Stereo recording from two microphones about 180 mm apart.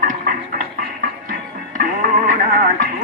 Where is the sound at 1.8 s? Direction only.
50° right (ahead or behind).